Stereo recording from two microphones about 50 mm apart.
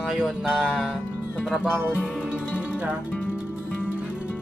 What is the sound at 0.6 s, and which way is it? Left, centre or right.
Music, right.